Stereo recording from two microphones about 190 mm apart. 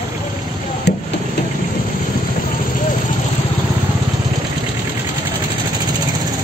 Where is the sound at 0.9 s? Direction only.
60° left (ahead or behind).